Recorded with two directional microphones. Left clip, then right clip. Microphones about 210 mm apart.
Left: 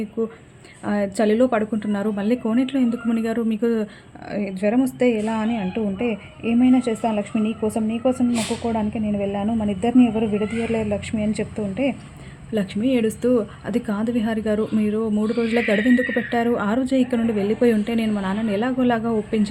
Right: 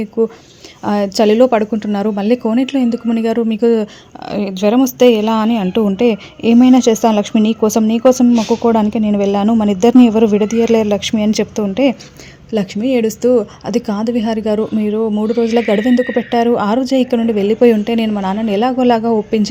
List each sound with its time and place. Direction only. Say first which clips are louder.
0.2 s a woman's voice: right 12 dB; 30° right (ahead or behind)
12.5 s a woman's voice: right 6 dB; 25° right (ahead or behind)